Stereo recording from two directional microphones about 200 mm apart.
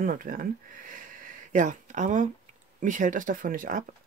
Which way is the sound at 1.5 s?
40° right (ahead or behind).